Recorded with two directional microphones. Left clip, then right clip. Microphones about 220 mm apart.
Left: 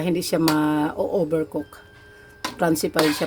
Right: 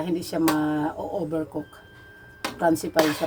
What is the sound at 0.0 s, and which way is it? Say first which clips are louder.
Speech: left 3 dB; 50° left (ahead or behind).